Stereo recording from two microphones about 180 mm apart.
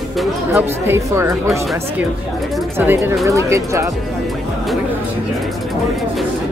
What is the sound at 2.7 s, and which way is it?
Speech, 10° right (ahead or behind).